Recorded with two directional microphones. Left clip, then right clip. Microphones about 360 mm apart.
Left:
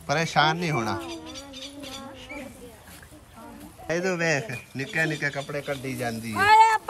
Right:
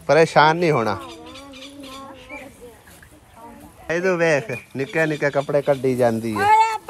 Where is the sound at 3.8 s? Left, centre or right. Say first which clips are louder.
Right 7 dB; centre.